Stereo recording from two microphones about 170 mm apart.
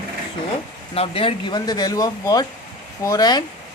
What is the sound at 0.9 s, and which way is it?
Speech, 35° left (ahead or behind).